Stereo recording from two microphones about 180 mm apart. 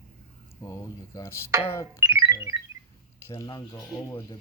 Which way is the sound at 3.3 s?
20° left (ahead or behind).